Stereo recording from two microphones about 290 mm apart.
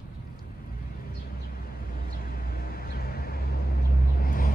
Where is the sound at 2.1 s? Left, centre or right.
Left.